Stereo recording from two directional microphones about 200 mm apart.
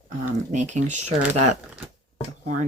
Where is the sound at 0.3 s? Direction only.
35° right (ahead or behind).